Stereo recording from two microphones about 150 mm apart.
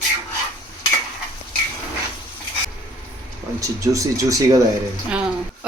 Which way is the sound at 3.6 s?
20° right (ahead or behind).